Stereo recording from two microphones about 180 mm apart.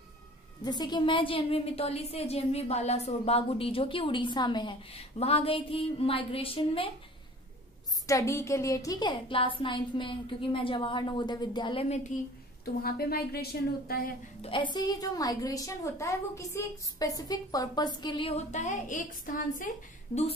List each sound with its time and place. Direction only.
0.7 s a woman's voice: 25° left (ahead or behind)
8.1 s a woman's voice: 15° left (ahead or behind); by 12.1 s 35° left (ahead or behind)
12.8 s a woman's voice: 60° left (ahead or behind)
14.4 s a woman's voice: 30° left (ahead or behind); by 19.7 s 50° left (ahead or behind)